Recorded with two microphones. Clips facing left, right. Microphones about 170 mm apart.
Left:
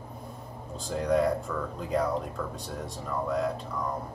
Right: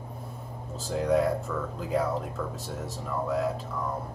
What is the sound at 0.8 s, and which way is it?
Speech, 5° right (ahead or behind).